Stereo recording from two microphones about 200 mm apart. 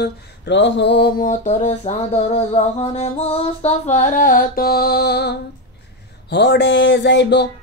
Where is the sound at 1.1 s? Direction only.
40° left (ahead or behind); by 5.3 s 55° left (ahead or behind).